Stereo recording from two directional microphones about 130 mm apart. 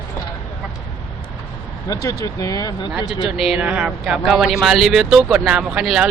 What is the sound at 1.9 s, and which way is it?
Speech, 25° left (ahead or behind).